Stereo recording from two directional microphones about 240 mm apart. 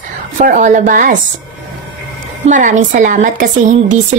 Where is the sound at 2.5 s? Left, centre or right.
Right.